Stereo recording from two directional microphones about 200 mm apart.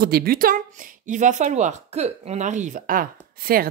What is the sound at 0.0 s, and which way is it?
Speech, 50° right (ahead or behind).